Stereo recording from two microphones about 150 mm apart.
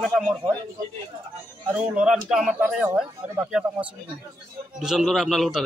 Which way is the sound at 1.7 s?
5° right (ahead or behind).